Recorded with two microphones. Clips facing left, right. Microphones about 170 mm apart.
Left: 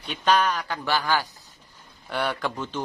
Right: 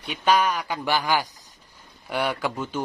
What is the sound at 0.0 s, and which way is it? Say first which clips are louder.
Speech: right 1 dB; 10° right (ahead or behind).